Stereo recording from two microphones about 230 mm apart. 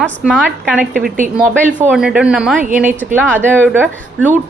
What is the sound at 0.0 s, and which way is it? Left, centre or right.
A woman's voice, centre.